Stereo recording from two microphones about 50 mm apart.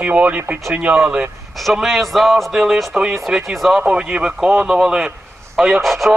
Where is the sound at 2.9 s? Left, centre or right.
Centre.